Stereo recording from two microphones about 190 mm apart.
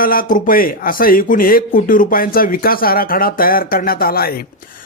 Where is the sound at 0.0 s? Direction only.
50° left (ahead or behind).